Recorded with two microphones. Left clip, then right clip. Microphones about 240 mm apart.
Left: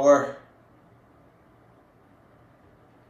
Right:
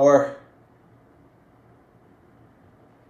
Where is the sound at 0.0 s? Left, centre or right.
Right.